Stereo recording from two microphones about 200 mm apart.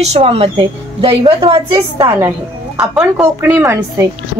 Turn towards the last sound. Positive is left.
turn(degrees=-10)  # may be behind; listen again after turning